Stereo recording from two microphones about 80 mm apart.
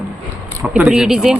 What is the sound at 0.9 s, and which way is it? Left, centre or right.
Speech, centre.